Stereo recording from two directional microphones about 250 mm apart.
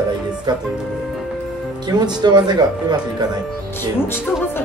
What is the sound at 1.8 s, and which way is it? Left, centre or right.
Speech, centre.